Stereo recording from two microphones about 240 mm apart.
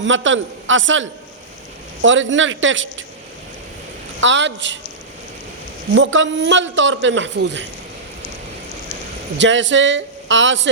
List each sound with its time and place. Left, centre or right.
0.0 s a man's voice: right
4.2 s a man's voice: right
5.9 s a man's voice: right
9.4 s a man's voice: right